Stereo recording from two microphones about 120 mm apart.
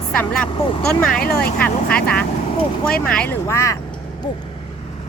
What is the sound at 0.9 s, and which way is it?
A woman's voice, 10° left (ahead or behind).